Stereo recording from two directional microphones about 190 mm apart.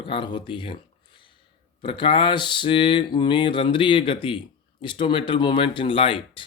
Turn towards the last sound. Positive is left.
turn(degrees=25)  # may be behind; listen again after turning